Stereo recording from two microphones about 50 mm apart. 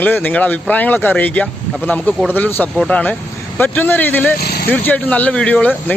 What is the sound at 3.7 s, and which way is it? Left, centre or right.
Speech, left.